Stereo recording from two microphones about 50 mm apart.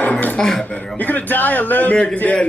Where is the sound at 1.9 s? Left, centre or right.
Left.